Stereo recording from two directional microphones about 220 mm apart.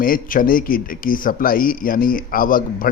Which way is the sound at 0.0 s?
40° left (ahead or behind).